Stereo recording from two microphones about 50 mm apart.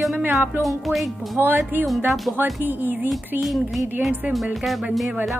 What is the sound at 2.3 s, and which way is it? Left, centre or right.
Speech, right.